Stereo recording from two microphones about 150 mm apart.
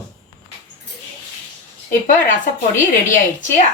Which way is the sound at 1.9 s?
60° left (ahead or behind).